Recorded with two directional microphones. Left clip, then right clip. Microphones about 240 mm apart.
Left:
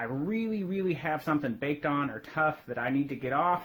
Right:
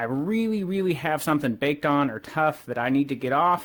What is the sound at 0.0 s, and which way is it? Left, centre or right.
Speech, right.